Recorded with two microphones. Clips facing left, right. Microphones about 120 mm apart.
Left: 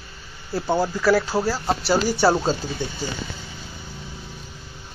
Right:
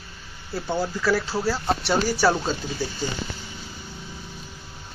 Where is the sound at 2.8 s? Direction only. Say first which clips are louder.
Even; 20° left (ahead or behind).